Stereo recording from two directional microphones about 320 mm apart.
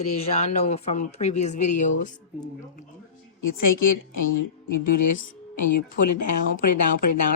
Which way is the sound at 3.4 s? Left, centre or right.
Left.